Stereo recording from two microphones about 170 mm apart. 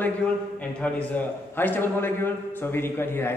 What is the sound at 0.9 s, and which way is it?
A man's voice, 10° left (ahead or behind).